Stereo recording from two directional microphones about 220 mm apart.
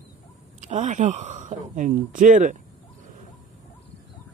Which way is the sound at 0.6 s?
35° right (ahead or behind).